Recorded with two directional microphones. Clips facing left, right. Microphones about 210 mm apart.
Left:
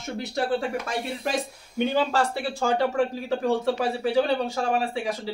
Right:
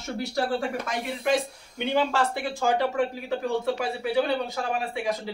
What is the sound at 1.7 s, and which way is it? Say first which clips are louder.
Speech: left 1 dB; 35° left (ahead or behind).